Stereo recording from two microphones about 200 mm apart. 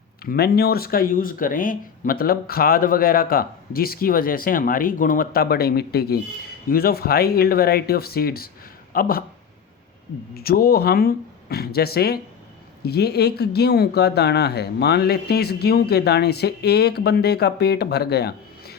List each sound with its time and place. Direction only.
0.3 s speech: 50° left (ahead or behind)
10.3 s speech: 50° left (ahead or behind)